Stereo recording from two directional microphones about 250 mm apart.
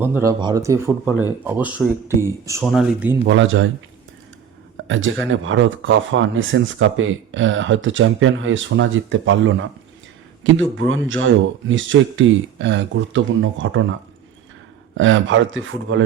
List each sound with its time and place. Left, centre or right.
0.0 s speech: centre
3.2 s speech: right
4.9 s speech: right
14.9 s speech: right